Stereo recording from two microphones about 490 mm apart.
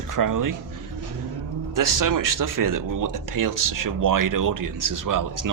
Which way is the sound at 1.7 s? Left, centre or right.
Right.